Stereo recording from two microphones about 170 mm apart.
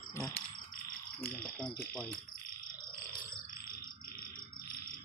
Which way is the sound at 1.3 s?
5° left (ahead or behind).